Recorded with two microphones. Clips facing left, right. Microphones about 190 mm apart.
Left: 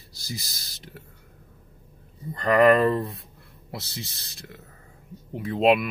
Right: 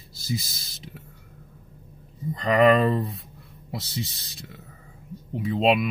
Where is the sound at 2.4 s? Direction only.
Centre (ahead or behind).